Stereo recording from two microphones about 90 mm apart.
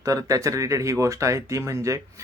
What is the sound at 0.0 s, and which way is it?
Speech, 40° right (ahead or behind).